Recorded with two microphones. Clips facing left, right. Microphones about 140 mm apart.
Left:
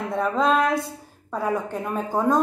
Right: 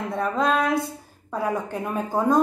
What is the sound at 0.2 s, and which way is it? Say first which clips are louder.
Speech: left 2 dB; centre (ahead or behind).